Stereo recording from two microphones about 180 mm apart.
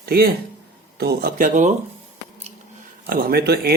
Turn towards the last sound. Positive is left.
turn(degrees=-60)  # may be behind; listen again after turning